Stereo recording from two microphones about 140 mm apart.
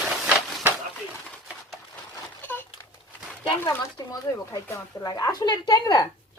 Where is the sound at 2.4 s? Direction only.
15° left (ahead or behind).